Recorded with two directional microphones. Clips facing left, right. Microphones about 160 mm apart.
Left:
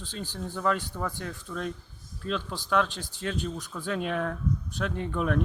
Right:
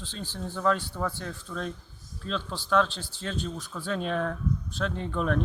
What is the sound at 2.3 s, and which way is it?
Speech, 10° left (ahead or behind).